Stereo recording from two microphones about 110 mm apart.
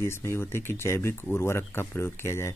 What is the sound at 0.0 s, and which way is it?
Speech, 25° left (ahead or behind).